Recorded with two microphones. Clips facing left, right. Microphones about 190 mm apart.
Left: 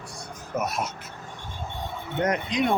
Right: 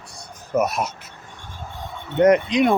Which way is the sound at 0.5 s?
75° right (ahead or behind).